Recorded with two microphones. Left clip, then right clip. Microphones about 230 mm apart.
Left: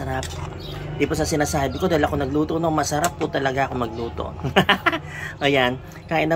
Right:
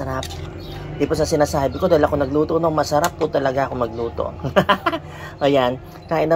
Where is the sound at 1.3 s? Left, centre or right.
Centre.